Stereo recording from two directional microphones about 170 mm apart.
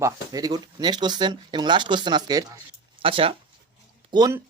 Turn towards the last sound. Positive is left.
turn(degrees=-25)  # may be behind; listen again after turning